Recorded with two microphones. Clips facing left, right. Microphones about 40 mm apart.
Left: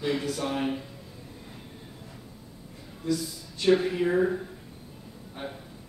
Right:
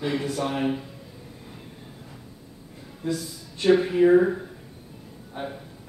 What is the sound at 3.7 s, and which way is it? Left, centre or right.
A man's voice, centre.